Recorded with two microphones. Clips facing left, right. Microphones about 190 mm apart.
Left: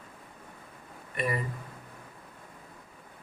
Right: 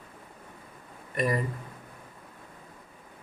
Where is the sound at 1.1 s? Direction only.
40° right (ahead or behind).